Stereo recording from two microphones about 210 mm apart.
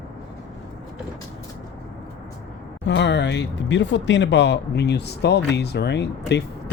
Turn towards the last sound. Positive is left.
turn(degrees=55)  # may be behind; listen again after turning